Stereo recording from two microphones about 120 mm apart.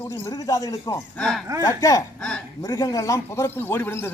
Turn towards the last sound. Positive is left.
turn(degrees=20)  # may be behind; listen again after turning